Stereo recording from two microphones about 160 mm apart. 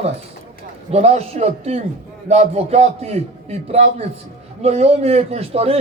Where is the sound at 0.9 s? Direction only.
40° right (ahead or behind).